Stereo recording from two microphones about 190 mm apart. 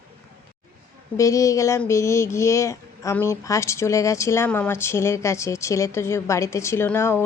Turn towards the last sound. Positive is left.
turn(degrees=10)  # may be behind; listen again after turning